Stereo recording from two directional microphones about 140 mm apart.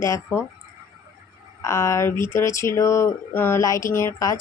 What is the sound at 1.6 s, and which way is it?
Speech, 20° left (ahead or behind).